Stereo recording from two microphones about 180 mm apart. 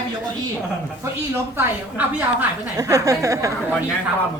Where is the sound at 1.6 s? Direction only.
10° right (ahead or behind).